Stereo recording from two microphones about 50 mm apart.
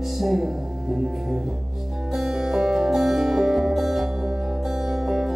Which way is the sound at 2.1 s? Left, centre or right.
Centre.